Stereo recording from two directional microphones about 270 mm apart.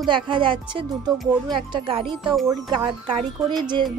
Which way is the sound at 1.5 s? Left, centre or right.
Centre.